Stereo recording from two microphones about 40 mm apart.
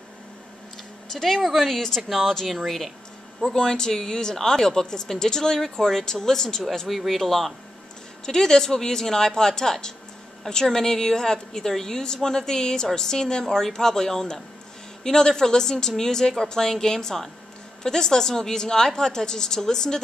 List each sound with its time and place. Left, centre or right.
1.1 s speech: centre
2.0 s speech: centre
2.2 s speech: centre
3.4 s speech: centre
8.3 s speech: centre